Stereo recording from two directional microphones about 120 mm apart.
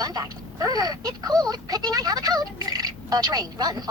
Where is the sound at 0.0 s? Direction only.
35° right (ahead or behind).